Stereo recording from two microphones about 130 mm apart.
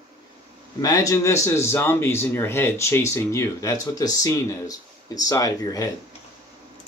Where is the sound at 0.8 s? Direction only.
25° left (ahead or behind).